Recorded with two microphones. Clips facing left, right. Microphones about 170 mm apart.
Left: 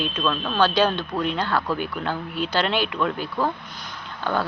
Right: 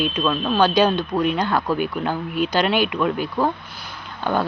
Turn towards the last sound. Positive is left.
turn(degrees=-15)  # may be behind; listen again after turning